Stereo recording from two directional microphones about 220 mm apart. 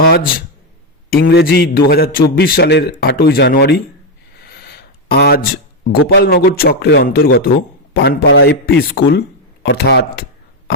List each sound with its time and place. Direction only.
0.0 s speech: 45° left (ahead or behind)
4.4 s a sound: 45° left (ahead or behind)
6.1 s speech: 45° left (ahead or behind)